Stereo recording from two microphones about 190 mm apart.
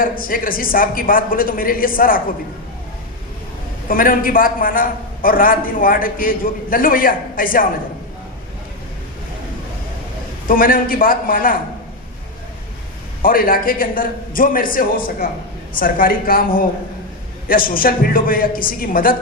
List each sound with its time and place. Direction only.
0.0 s a man's voice: 45° left (ahead or behind)
3.8 s a man's voice: 45° left (ahead or behind)
10.5 s a man's voice: 45° left (ahead or behind)
13.2 s a man's voice: 50° left (ahead or behind)